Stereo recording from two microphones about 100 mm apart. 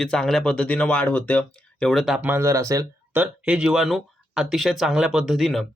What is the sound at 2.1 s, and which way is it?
Speech, 15° right (ahead or behind).